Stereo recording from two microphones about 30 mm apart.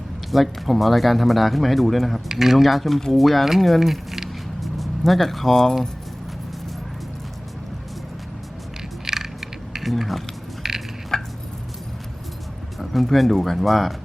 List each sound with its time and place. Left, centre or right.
0.3 s speech: centre
2.3 s speech: centre
4.6 s music: centre
9.0 s coin: centre
10.6 s a sound: centre
11.1 s a sound: centre
12.8 s speech: centre